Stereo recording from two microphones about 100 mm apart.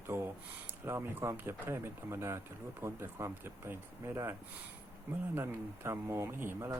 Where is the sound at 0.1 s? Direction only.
25° right (ahead or behind).